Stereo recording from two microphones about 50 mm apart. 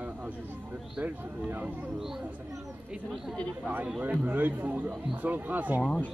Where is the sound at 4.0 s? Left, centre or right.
Right.